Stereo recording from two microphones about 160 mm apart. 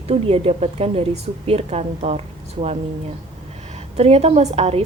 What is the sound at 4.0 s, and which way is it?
Speech, 40° right (ahead or behind).